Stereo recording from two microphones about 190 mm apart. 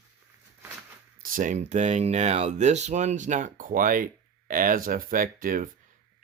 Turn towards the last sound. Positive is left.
turn(degrees=-45)  # may be behind; listen again after turning